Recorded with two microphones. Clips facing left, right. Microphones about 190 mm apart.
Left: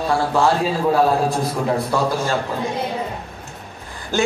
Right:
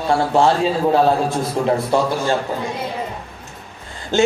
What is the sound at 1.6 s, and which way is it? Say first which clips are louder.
Speech: right 6 dB; 25° right (ahead or behind).